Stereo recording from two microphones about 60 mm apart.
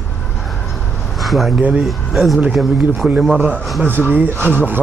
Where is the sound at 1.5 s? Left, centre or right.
Right.